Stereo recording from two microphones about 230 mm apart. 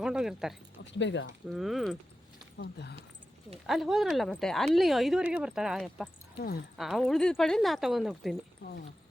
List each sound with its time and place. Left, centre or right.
0.0 s speech: centre
0.8 s speech: left
1.5 s speech: centre
2.6 s speech: left
3.7 s speech: centre